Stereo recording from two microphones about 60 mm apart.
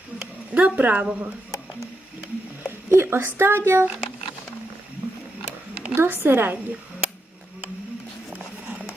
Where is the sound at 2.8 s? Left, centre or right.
Right.